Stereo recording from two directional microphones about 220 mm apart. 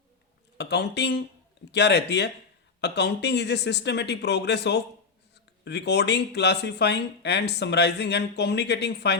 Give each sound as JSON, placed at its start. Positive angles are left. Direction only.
{"t": 0.6, "sound": "speech", "side_deg": 50}